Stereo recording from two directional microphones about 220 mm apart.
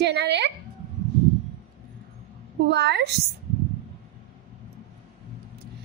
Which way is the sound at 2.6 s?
50° right (ahead or behind).